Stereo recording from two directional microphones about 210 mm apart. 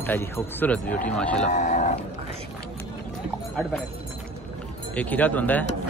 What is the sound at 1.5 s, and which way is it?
Speech, 35° left (ahead or behind).